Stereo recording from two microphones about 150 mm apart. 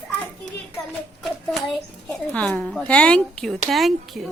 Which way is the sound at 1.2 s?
Centre (ahead or behind).